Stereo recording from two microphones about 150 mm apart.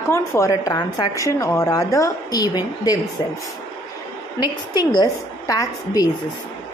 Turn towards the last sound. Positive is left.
turn(degrees=25)  # may be behind; listen again after turning